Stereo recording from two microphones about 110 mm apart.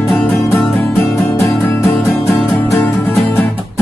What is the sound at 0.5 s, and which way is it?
Music, 20° left (ahead or behind).